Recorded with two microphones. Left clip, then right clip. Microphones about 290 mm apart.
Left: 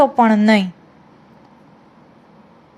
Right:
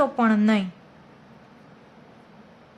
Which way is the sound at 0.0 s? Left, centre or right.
Centre.